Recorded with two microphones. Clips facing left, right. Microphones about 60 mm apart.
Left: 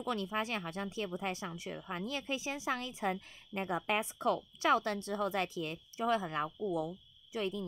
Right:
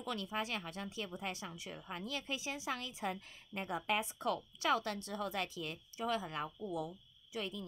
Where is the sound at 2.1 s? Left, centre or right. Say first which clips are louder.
Left 3 dB; left.